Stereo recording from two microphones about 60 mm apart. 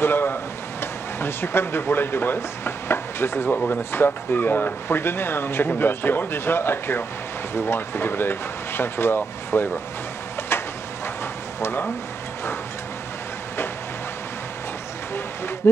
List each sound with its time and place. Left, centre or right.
0.0 s a sound: left
1.2 s speech: left
3.4 s speech: left
3.9 s speech: left
15.6 s speech: left